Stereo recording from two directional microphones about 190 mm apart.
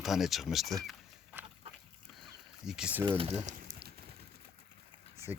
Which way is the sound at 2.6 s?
5° right (ahead or behind).